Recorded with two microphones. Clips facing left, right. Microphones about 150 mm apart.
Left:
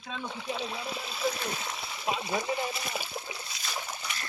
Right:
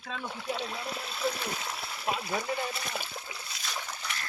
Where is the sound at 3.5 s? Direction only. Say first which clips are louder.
Left 1 dB; centre (ahead or behind).